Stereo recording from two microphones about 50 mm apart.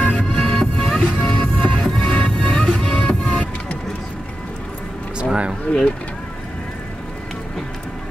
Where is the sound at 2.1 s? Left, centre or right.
Left.